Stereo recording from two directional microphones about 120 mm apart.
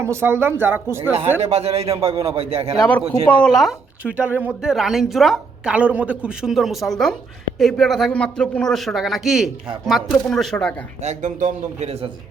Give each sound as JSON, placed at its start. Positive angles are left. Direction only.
{"t": 0.0, "sound": "speech", "side_deg": -20}
{"t": 1.4, "sound": "a man's voice", "side_deg": -60}
{"t": 3.2, "sound": "a woman's voice", "side_deg": 5}
{"t": 4.1, "sound": "a woman's voice", "side_deg": -10}
{"t": 11.0, "sound": "a man's voice", "side_deg": -85}